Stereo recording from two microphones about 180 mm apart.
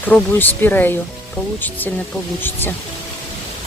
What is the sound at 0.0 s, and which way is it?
Speech, 10° left (ahead or behind).